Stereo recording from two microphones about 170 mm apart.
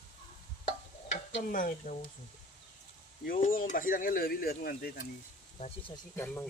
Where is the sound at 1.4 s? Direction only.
55° left (ahead or behind).